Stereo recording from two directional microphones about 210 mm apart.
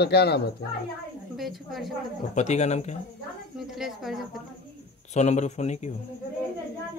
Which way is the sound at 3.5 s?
Centre (ahead or behind).